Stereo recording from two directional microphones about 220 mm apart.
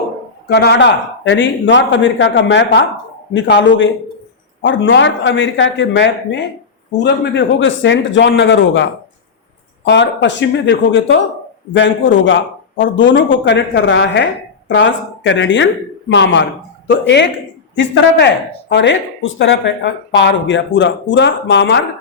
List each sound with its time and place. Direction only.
0.4 s speech: 50° left (ahead or behind)